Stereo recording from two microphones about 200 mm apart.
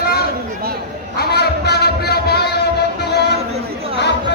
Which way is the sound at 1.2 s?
55° left (ahead or behind).